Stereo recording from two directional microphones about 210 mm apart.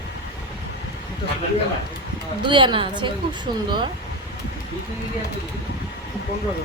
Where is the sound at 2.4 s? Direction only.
25° right (ahead or behind).